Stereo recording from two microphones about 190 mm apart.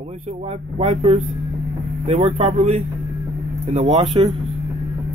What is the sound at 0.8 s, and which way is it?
Speech, 35° right (ahead or behind).